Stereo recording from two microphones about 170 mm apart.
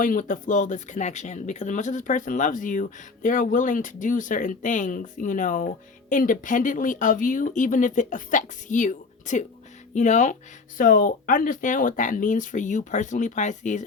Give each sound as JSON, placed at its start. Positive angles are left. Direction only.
{"t": 0.0, "sound": "speech", "side_deg": 50}